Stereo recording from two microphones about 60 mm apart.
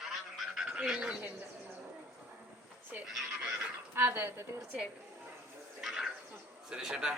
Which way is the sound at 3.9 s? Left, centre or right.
Right.